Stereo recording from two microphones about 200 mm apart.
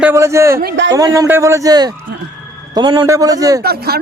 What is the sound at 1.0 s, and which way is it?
A man's voice, 15° right (ahead or behind).